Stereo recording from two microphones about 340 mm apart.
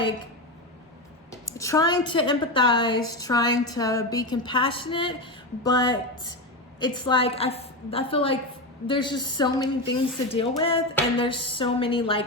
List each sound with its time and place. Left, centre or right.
1.5 s speech: centre
5.6 s speech: left
6.7 s speech: centre